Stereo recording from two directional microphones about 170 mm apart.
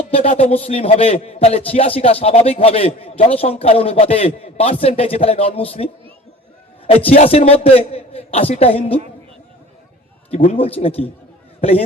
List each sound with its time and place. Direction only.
0.1 s a man's voice: 35° left (ahead or behind)
10.3 s speech: 35° left (ahead or behind)